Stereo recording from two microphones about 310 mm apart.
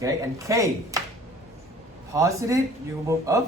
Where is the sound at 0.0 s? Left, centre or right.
Centre.